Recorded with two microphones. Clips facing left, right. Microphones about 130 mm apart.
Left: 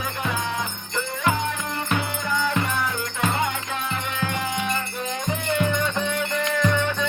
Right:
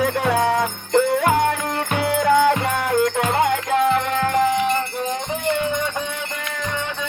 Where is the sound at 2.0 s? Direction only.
85° right.